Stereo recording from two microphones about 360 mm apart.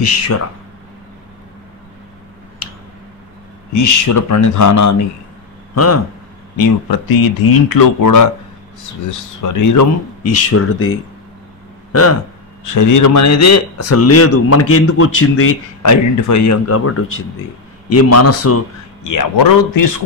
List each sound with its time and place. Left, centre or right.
3.7 s a man's voice: left
6.5 s speech: left
9.4 s a man's voice: left
12.6 s a man's voice: left
19.0 s speech: left